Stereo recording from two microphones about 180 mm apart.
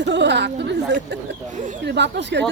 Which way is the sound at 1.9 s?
75° right (ahead or behind).